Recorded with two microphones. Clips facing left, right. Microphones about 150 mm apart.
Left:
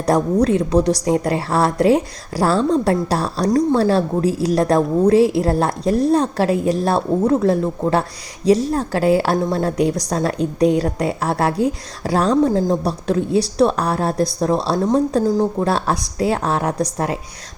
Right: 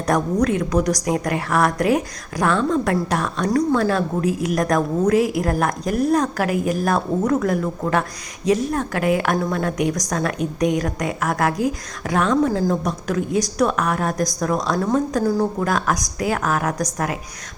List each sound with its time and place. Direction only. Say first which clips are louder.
0.0 s a woman's voice: left 3 dB; 30° left (ahead or behind)